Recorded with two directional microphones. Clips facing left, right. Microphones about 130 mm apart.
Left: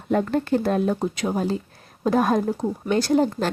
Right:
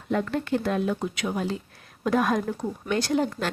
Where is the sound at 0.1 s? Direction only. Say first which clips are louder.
Left 4 dB; 40° left (ahead or behind).